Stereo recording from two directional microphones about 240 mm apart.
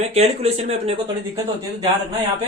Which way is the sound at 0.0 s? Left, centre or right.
Right.